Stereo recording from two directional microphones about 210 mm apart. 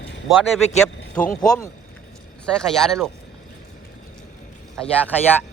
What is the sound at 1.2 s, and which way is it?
Speech, 5° left (ahead or behind).